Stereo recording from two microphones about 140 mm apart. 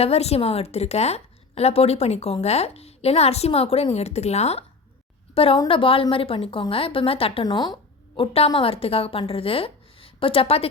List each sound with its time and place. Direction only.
0.0 s a woman's voice: 45° left (ahead or behind)
7.4 s a woman's voice: 30° left (ahead or behind)